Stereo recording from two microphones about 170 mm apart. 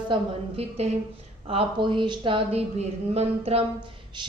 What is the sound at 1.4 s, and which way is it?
Speech, 30° right (ahead or behind).